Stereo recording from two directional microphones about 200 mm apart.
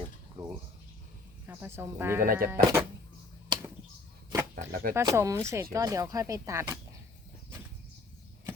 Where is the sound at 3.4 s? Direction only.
20° right (ahead or behind).